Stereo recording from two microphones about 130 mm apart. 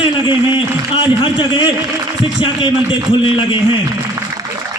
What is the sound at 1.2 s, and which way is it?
Speech, 40° left (ahead or behind).